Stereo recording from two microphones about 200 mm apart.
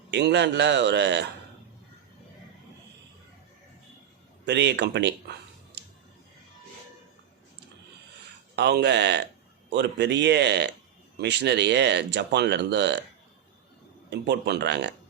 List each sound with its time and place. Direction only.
0.1 s speech: 60° right (ahead or behind)
4.4 s speech: 60° right (ahead or behind)
8.5 s speech: 55° right (ahead or behind)
14.1 s speech: 60° right (ahead or behind)